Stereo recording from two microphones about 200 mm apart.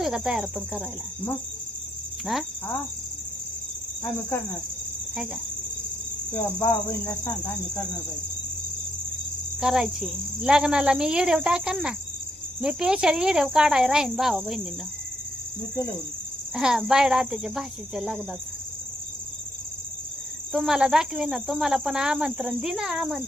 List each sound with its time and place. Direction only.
0.0 s speech: 5° right (ahead or behind)
6.3 s cricket: 15° left (ahead or behind)
9.6 s speech: 5° right (ahead or behind)
16.6 s speech: 5° right (ahead or behind)
20.5 s speech: 5° right (ahead or behind)